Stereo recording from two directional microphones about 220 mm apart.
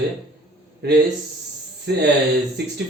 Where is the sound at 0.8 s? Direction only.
50° right (ahead or behind).